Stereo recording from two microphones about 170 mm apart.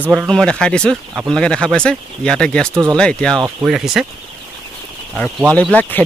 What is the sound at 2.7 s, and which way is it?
Speech, 20° right (ahead or behind).